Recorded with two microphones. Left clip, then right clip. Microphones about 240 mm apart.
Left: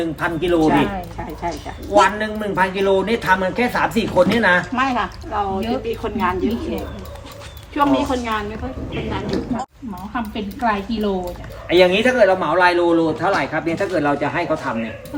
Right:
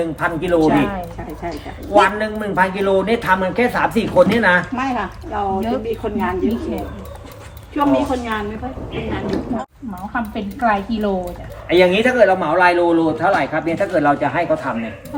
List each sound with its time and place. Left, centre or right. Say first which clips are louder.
0.0 s speech: right 1 dB; centre
1.9 s speech: right 1 dB; centre
4.7 s a woman's voice: left 2 dB; centre
7.8 s a woman's voice: right 1 dB; centre